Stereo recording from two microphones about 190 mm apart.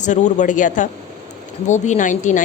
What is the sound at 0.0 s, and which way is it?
A woman's voice, 40° left (ahead or behind).